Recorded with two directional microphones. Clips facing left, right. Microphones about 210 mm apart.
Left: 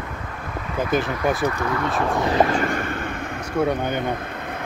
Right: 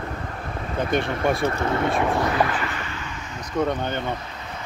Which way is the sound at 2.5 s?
50° left (ahead or behind).